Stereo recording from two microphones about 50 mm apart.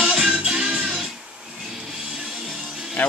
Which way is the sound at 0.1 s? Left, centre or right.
Centre.